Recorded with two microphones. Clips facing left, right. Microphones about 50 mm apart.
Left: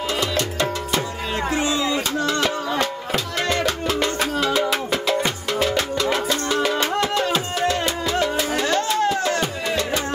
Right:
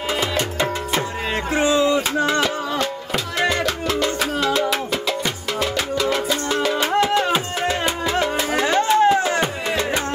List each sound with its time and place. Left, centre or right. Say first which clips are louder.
0.2 s music: right 1 dB; right
2.1 s a sound: right 3 dB; right
2.8 s music: even; centre
6.9 s music: right 3 dB; centre